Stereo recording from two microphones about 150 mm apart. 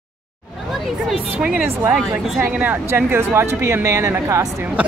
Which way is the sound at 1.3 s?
5° right (ahead or behind).